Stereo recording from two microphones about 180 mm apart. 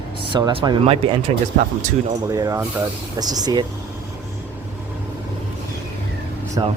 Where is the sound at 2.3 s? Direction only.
20° right (ahead or behind).